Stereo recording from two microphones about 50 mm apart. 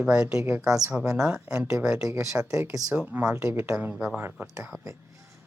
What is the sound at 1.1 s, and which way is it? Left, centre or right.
Speech, right.